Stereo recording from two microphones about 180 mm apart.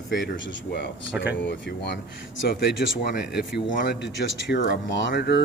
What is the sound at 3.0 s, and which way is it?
Speech, 65° left (ahead or behind).